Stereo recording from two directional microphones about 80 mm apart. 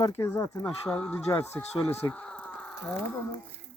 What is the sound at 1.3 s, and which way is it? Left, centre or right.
Speech, left.